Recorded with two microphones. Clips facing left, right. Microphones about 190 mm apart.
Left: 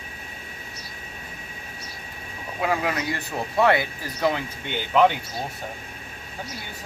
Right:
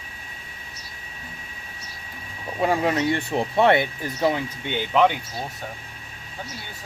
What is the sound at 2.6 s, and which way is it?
Speech, 30° right (ahead or behind).